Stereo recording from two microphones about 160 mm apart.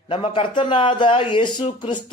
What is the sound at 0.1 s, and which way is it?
Speech, 35° left (ahead or behind).